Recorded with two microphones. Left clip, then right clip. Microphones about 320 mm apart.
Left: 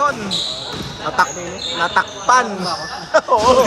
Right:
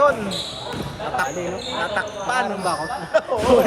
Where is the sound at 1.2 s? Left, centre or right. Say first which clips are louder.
Left 8 dB; centre.